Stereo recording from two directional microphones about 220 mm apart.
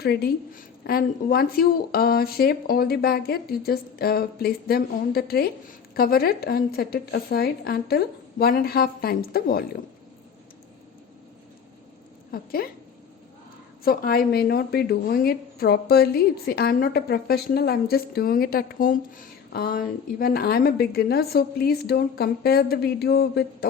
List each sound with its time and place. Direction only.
0.0 s a woman's voice: 45° left (ahead or behind)
12.3 s a woman's voice: 40° left (ahead or behind)
13.8 s a woman's voice: 40° left (ahead or behind)